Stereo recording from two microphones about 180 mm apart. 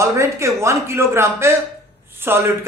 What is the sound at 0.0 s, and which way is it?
Speech, 15° right (ahead or behind).